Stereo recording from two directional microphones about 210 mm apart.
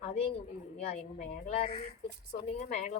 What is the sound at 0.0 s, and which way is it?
A woman's voice, 30° left (ahead or behind).